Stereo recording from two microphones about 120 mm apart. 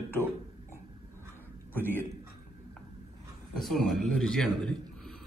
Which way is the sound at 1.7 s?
15° left (ahead or behind).